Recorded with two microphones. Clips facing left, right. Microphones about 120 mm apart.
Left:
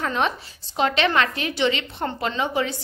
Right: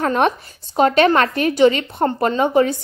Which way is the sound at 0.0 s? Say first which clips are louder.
Right 7 dB; 50° right (ahead or behind).